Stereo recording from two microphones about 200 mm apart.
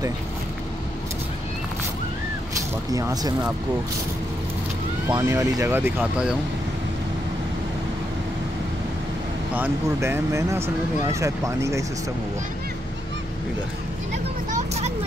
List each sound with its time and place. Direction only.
2.9 s speech: 15° right (ahead or behind)
5.1 s speech: 15° right (ahead or behind)
9.5 s speech: 10° right (ahead or behind)
14.5 s vehicle: 35° right (ahead or behind)